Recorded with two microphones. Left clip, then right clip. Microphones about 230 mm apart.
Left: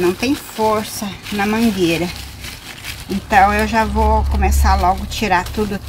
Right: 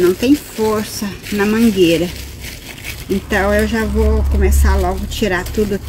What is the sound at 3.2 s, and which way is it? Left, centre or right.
Speech, left.